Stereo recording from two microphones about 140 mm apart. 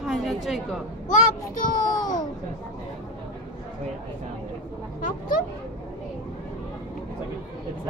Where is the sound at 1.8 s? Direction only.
30° left (ahead or behind).